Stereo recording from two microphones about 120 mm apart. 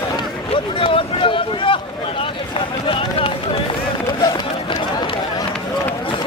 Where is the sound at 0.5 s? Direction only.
50° left (ahead or behind).